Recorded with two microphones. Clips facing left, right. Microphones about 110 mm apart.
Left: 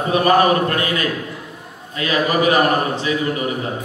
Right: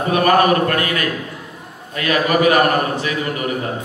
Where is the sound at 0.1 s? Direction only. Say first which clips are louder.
Even; 25° left (ahead or behind).